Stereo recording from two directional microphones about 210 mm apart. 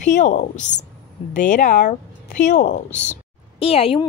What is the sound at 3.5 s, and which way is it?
Speech, 25° left (ahead or behind).